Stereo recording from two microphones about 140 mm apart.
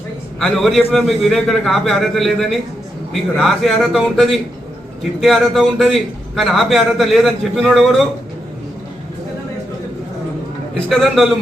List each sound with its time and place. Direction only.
0.3 s a man's voice: centre (ahead or behind)
10.8 s a man's voice: centre (ahead or behind)